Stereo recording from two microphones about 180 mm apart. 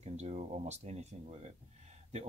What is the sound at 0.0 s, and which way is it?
Speech, 35° right (ahead or behind).